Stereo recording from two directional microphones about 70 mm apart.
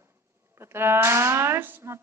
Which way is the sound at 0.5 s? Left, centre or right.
Right.